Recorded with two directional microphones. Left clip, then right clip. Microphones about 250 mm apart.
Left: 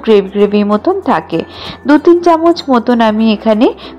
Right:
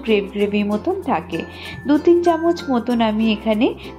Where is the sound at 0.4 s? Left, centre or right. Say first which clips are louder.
Left 10 dB; centre.